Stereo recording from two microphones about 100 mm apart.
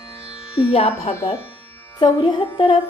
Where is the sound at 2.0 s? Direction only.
50° left (ahead or behind).